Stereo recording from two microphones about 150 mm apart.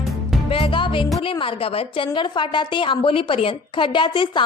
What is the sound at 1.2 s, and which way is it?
A woman's voice, 35° left (ahead or behind).